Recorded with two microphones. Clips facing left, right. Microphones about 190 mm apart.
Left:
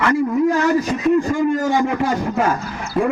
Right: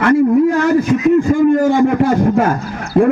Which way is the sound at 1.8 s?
55° right (ahead or behind).